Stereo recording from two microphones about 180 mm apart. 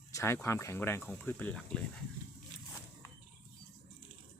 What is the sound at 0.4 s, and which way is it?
Speech, 15° left (ahead or behind).